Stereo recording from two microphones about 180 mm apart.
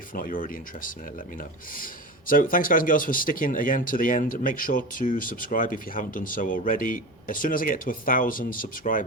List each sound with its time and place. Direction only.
0.1 s speech: 50° left (ahead or behind)